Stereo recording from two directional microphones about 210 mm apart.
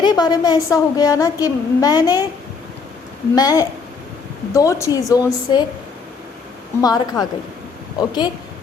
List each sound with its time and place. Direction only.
0.0 s a woman's voice: 20° left (ahead or behind)
3.3 s a woman's voice: 15° left (ahead or behind)
6.8 s a woman's voice: 20° left (ahead or behind)